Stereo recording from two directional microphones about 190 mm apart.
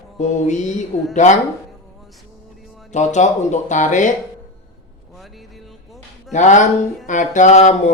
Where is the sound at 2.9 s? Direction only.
40° left (ahead or behind).